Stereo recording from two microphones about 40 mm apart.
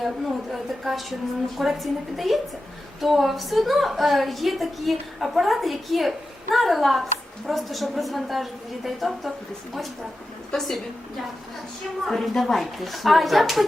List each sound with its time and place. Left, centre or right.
0.0 s a woman's voice: centre
10.5 s a woman's voice: centre
12.0 s a woman's voice: centre